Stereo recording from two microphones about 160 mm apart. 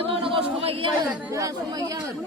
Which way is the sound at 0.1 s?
35° right (ahead or behind).